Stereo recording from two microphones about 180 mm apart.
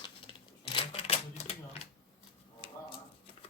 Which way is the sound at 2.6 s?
30° left (ahead or behind).